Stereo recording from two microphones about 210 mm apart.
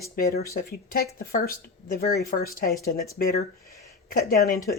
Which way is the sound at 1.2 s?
45° left (ahead or behind).